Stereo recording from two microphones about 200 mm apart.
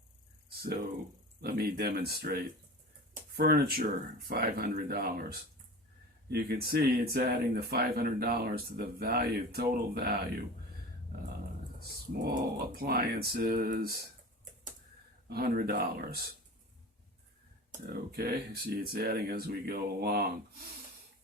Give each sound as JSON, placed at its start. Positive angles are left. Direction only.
{"t": 1.4, "sound": "speech", "side_deg": -50}
{"t": 11.8, "sound": "speech", "side_deg": -50}
{"t": 15.3, "sound": "speech", "side_deg": -50}
{"t": 17.7, "sound": "speech", "side_deg": -50}